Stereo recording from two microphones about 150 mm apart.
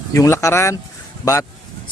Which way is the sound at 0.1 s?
20° left (ahead or behind).